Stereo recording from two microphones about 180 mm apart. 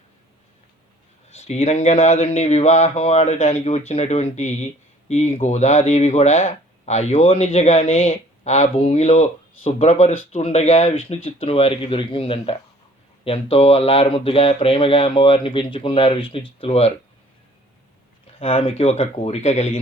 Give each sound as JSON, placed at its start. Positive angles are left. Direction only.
{"t": 1.3, "sound": "speech", "side_deg": 40}
{"t": 18.3, "sound": "speech", "side_deg": 30}